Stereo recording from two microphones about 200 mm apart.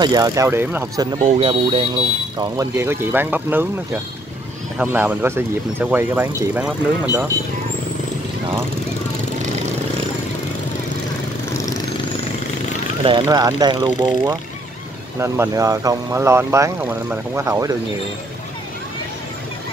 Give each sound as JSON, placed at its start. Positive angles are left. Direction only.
{"t": 0.0, "sound": "speech", "side_deg": -20}
{"t": 1.4, "sound": "speech", "side_deg": -25}
{"t": 2.3, "sound": "speech", "side_deg": -15}
{"t": 11.5, "sound": "vehicle", "side_deg": 15}
{"t": 13.0, "sound": "speech", "side_deg": -20}